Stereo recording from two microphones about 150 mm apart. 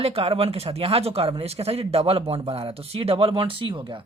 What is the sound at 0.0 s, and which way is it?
Speech, 40° right (ahead or behind).